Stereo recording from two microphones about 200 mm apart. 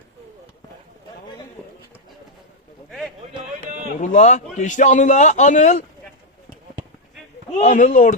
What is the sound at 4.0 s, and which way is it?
A man's voice, 35° left (ahead or behind).